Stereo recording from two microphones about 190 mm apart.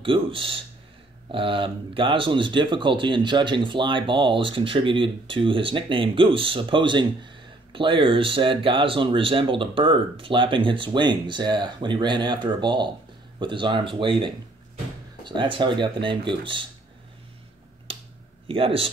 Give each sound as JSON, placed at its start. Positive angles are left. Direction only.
{"t": 0.0, "sound": "speech", "side_deg": -30}
{"t": 18.5, "sound": "speech", "side_deg": -30}